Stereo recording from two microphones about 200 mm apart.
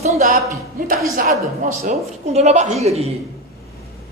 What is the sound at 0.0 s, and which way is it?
A woman's voice, 40° right (ahead or behind).